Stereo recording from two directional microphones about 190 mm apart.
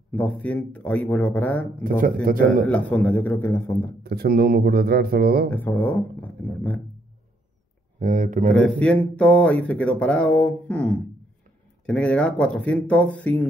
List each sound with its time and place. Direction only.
0.1 s speech: 5° left (ahead or behind)
1.8 s speech: 45° right (ahead or behind)
2.6 s speech: 5° left (ahead or behind)
4.0 s speech: 55° right (ahead or behind)
5.5 s speech: 10° left (ahead or behind)
8.0 s speech: 45° right (ahead or behind)
8.5 s speech: 5° left (ahead or behind)